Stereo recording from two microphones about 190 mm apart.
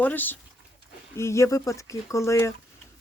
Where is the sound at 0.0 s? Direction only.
10° left (ahead or behind).